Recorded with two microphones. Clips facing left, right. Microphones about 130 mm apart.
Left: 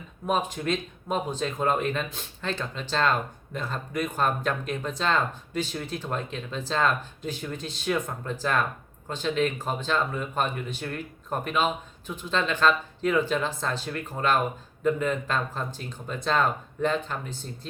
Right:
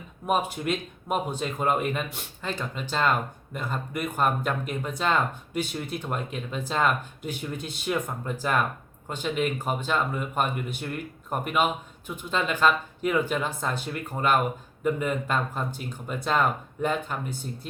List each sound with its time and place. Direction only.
0.3 s speech: 10° right (ahead or behind)